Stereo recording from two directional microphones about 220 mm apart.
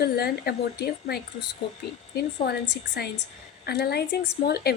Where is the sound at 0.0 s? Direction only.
45° left (ahead or behind).